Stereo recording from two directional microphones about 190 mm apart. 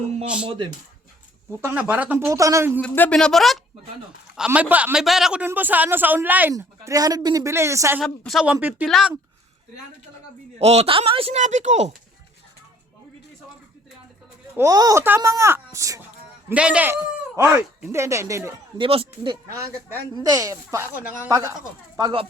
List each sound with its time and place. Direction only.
0.4 s speech: 30° right (ahead or behind)
1.6 s a man's voice: 10° right (ahead or behind)
2.8 s a man's voice: 5° left (ahead or behind); by 8.0 s 15° right (ahead or behind)
8.0 s speech: centre (ahead or behind)
10.6 s speech: 35° right (ahead or behind)
14.5 s a man's voice: 15° right (ahead or behind)
18.8 s a man's voice: 30° right (ahead or behind)